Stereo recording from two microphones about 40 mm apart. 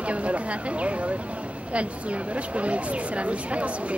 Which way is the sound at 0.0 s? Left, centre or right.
Right.